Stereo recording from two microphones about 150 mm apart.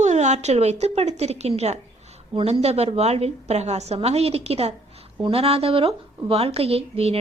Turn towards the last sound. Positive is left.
turn(degrees=-40)  # may be behind; listen again after turning